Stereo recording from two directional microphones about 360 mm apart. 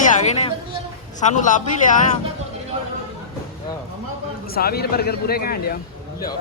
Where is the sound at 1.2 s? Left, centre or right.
Centre.